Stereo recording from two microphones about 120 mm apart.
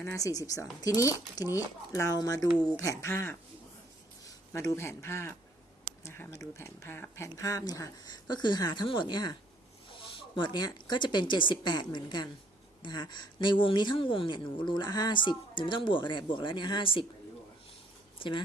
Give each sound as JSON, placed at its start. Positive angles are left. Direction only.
{"t": 0.0, "sound": "a man's voice", "side_deg": 25}
{"t": 10.3, "sound": "speech", "side_deg": 40}
{"t": 18.2, "sound": "speech", "side_deg": 45}